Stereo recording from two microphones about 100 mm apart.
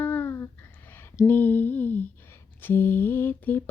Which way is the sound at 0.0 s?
20° left (ahead or behind).